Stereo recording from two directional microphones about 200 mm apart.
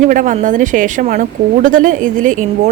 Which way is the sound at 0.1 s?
40° right (ahead or behind).